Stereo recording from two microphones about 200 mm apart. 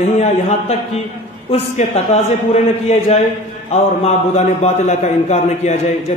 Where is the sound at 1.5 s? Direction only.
35° left (ahead or behind).